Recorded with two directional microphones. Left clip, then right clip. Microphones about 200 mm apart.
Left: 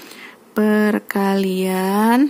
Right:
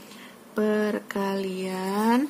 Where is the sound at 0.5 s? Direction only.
45° left (ahead or behind).